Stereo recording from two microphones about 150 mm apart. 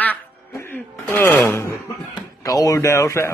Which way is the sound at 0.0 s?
10° left (ahead or behind).